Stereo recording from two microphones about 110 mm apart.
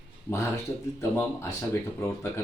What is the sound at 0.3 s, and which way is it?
Speech, 25° left (ahead or behind).